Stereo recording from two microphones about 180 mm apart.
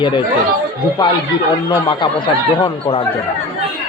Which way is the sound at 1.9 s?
25° left (ahead or behind).